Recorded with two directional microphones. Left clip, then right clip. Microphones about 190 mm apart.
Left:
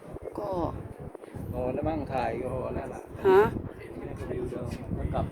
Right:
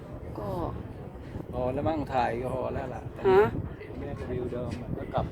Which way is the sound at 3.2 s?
25° left (ahead or behind).